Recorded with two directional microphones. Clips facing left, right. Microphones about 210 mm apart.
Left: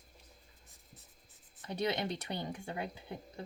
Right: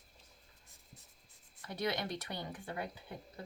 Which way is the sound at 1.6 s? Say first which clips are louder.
Left 3 dB; 20° left (ahead or behind).